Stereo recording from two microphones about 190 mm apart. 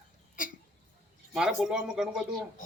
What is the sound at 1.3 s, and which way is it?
Speech, 5° right (ahead or behind).